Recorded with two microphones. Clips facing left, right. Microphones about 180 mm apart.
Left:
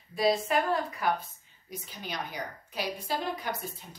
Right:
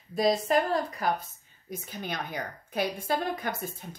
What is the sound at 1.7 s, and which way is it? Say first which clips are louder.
A woman's voice: right 4 dB; 55° right (ahead or behind).